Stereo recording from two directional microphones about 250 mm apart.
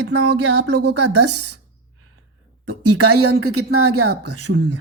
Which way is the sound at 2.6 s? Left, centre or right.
Right.